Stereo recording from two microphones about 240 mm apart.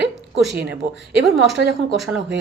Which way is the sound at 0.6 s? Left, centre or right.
Right.